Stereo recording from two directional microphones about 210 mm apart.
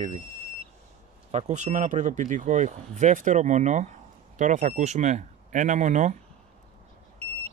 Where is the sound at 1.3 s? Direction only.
35° right (ahead or behind).